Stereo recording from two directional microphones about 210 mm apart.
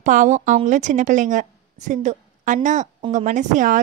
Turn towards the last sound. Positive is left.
turn(degrees=-40)  # may be behind; listen again after turning